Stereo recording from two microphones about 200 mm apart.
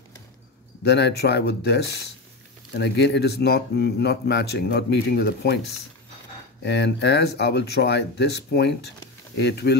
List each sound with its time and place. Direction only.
0.8 s speech: 55° left (ahead or behind)
6.6 s speech: 60° left (ahead or behind)